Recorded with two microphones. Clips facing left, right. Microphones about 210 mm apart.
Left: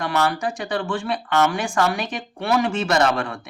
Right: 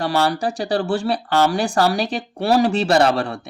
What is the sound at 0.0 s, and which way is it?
Speech, 35° right (ahead or behind).